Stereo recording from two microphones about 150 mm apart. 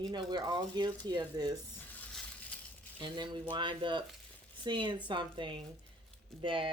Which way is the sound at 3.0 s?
30° right (ahead or behind).